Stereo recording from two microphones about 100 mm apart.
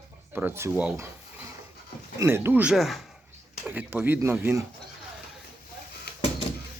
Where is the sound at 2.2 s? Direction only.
25° right (ahead or behind).